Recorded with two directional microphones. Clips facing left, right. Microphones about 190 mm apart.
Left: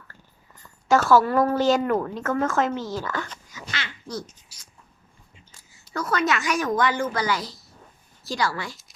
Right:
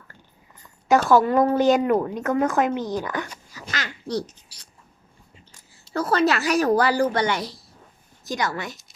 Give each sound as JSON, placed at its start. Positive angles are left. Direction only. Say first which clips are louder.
{"t": 0.9, "sound": "a woman's voice", "louder": "right 1 dB", "side_deg": -15}
{"t": 3.5, "sound": "a sound", "louder": "right 4 dB", "side_deg": -45}
{"t": 5.8, "sound": "a woman's voice", "louder": "right 5 dB", "side_deg": -30}
{"t": 8.2, "sound": "a woman's voice", "louder": "even", "side_deg": -20}